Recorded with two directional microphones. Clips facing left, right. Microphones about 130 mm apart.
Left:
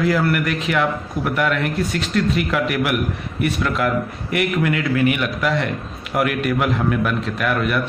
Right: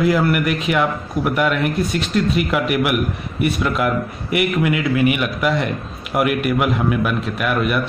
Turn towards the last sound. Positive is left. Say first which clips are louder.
# right 1 dB
turn(degrees=-15)  # may be behind; listen again after turning